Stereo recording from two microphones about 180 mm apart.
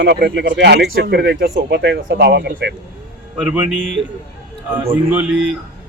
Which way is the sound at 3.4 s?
10° right (ahead or behind).